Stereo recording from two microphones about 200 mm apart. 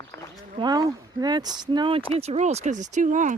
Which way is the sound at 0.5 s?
20° right (ahead or behind).